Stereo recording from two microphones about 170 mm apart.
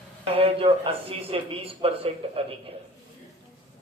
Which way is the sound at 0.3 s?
35° right (ahead or behind).